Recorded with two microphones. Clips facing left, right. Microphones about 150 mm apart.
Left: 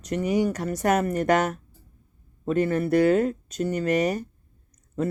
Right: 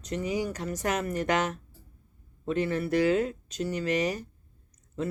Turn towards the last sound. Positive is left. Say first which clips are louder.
# left 5 dB
turn(degrees=50)  # may be behind; listen again after turning